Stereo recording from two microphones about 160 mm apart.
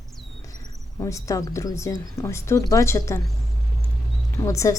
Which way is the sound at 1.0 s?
20° left (ahead or behind).